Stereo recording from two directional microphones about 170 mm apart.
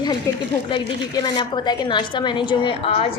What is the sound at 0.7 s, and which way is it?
A woman's voice, 25° left (ahead or behind).